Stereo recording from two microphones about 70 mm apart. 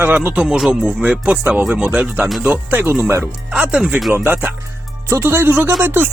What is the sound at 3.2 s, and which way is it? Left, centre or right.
Speech, centre.